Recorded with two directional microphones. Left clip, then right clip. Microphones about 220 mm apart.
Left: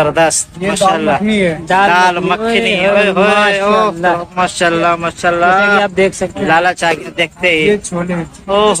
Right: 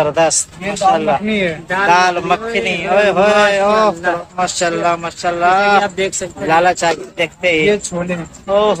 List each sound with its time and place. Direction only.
0.0 s speech: 10° right (ahead or behind)
5.9 s speech: 30° left (ahead or behind)
6.4 s speech: 10° right (ahead or behind)